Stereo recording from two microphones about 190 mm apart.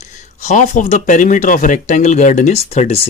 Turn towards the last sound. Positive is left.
turn(degrees=30)  # may be behind; listen again after turning